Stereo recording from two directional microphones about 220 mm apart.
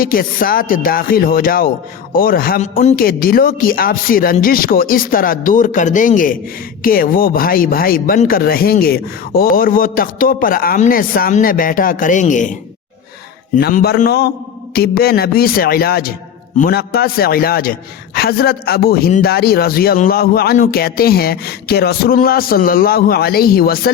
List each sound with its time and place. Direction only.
0.0 s speech: 40° left (ahead or behind)
13.6 s a man's voice: 45° left (ahead or behind)